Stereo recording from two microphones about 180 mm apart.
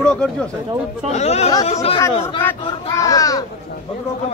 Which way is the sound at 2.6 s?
20° left (ahead or behind).